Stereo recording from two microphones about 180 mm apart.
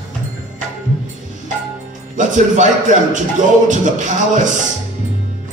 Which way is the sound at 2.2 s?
45° right (ahead or behind).